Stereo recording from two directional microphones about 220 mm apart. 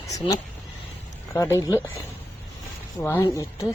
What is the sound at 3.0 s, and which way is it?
Speech, 10° left (ahead or behind).